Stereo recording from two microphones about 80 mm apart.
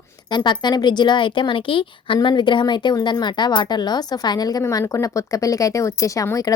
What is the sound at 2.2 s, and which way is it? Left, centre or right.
A woman's voice, left.